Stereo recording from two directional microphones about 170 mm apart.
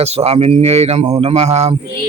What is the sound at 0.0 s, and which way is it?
Speech, 40° right (ahead or behind).